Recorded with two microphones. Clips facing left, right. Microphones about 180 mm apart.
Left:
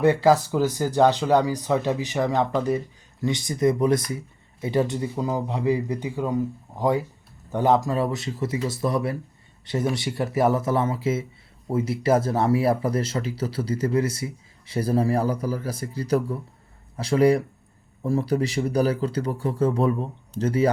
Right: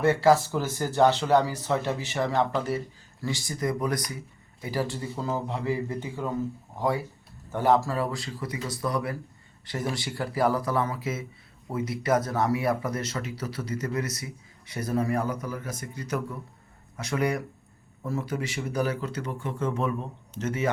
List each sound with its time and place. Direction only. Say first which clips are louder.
0.0 s speech: left 3 dB; 15° left (ahead or behind); by 20.7 s 35° left (ahead or behind)